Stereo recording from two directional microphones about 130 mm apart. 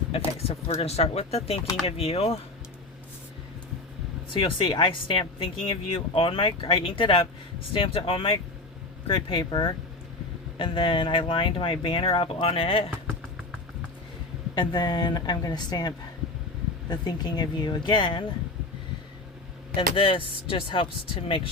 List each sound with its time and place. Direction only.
0.1 s speech: 50° left (ahead or behind)
4.4 s a woman's voice: 40° left (ahead or behind)
14.5 s a woman's voice: 35° left (ahead or behind)
19.7 s a woman's voice: 40° left (ahead or behind)